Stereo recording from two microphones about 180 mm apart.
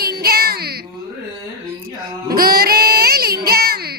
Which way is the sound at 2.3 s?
55° right (ahead or behind).